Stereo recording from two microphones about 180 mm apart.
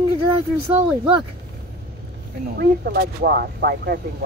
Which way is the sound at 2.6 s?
60° right (ahead or behind).